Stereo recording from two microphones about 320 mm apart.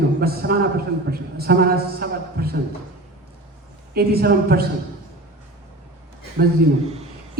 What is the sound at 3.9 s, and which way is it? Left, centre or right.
Speech, right.